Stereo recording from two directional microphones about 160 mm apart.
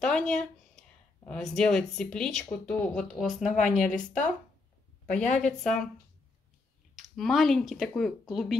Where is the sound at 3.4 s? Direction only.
50° left (ahead or behind).